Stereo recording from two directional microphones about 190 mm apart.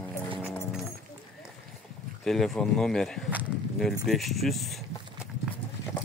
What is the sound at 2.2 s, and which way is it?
Speech, centre (ahead or behind).